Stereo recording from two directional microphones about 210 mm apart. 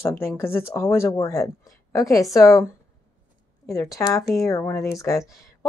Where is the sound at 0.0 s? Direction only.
10° left (ahead or behind).